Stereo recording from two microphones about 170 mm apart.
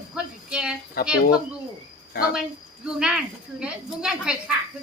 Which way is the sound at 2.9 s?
5° right (ahead or behind).